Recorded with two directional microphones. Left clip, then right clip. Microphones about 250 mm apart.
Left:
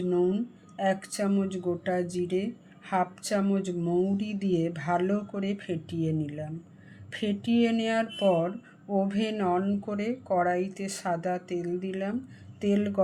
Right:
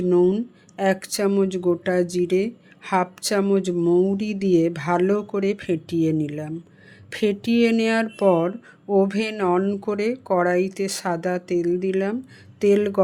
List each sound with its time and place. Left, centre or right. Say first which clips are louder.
0.1 s speech: right 8 dB; right